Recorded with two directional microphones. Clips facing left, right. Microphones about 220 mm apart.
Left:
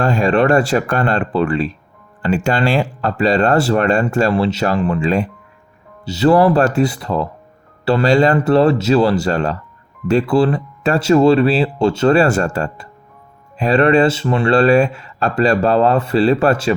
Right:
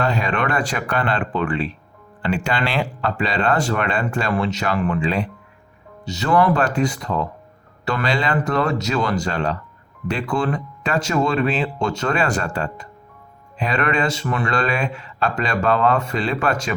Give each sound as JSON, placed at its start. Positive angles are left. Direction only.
{"t": 0.0, "sound": "speech", "side_deg": 45}